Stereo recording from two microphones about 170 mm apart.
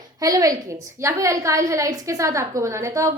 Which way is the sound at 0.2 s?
20° right (ahead or behind).